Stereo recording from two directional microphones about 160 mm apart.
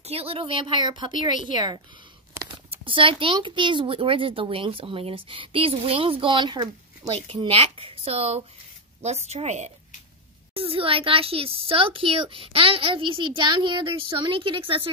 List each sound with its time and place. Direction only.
0.0 s speech: 40° right (ahead or behind)